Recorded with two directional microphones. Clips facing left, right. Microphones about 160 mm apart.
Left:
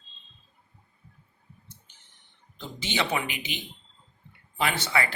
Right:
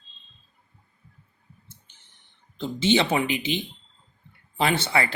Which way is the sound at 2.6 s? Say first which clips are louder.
Right 9 dB; 30° right (ahead or behind).